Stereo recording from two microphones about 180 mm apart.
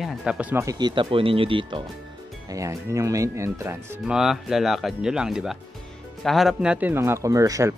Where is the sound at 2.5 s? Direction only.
15° right (ahead or behind).